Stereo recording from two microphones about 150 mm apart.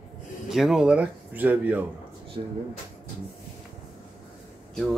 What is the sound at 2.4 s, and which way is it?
Speech, 35° right (ahead or behind).